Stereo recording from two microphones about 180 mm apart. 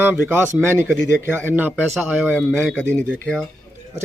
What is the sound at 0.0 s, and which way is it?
Speech, 10° right (ahead or behind).